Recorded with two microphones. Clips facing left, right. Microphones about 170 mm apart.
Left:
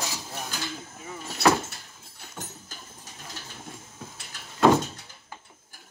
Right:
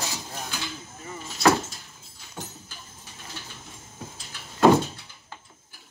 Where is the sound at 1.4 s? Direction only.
65° left (ahead or behind).